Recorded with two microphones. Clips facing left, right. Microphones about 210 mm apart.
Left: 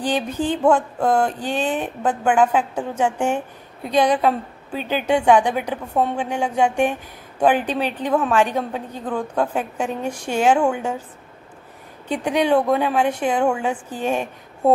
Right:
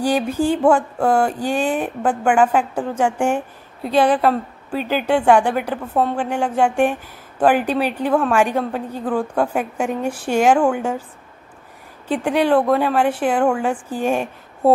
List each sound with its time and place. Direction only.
0.0 s a woman's voice: 10° right (ahead or behind)
12.1 s a woman's voice: 5° right (ahead or behind)